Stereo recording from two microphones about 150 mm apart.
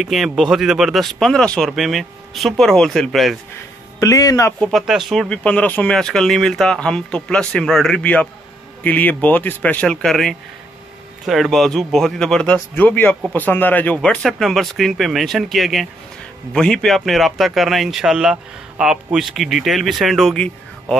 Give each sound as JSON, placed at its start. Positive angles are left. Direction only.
{"t": 0.0, "sound": "speech", "side_deg": 0}
{"t": 4.0, "sound": "speech", "side_deg": 20}
{"t": 4.6, "sound": "speech", "side_deg": 0}